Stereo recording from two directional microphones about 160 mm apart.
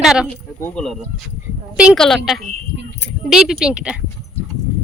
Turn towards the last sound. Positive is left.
turn(degrees=-5)  # may be behind; listen again after turning